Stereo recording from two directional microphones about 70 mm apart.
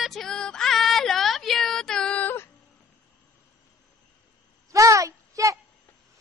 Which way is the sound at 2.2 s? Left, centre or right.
Left.